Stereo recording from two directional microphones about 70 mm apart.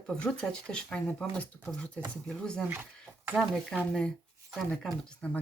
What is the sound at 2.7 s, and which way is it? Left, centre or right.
Speech, right.